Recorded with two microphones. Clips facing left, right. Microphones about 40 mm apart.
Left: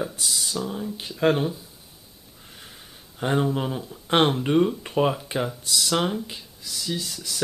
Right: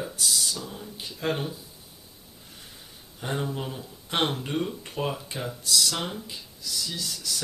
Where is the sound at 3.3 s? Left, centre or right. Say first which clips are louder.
Left 7 dB; left.